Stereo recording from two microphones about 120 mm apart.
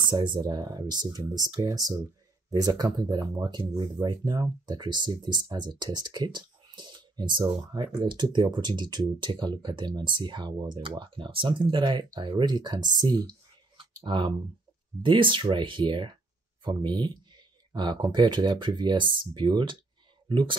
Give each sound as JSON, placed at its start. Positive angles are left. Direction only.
{"t": 0.1, "sound": "speech", "side_deg": -40}